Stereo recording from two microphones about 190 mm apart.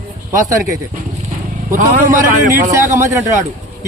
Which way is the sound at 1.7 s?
45° right (ahead or behind).